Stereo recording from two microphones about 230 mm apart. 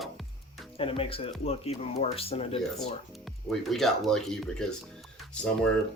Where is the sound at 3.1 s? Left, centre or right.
Centre.